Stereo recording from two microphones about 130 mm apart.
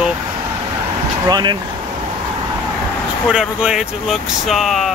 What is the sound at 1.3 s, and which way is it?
Speech, 35° right (ahead or behind).